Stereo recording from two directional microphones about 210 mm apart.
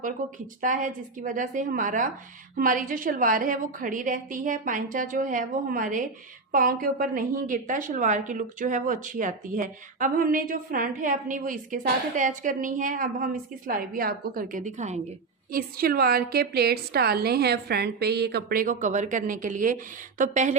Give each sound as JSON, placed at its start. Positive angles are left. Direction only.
{"t": 0.6, "sound": "a woman's voice", "side_deg": -40}